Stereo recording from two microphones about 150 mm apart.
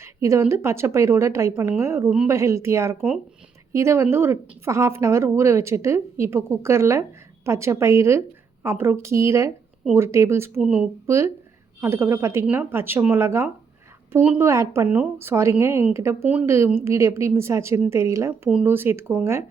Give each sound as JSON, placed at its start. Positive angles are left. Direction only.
{"t": 0.0, "sound": "a woman's voice", "side_deg": -20}
{"t": 10.6, "sound": "speech", "side_deg": -5}
{"t": 11.0, "sound": "a woman's voice", "side_deg": -20}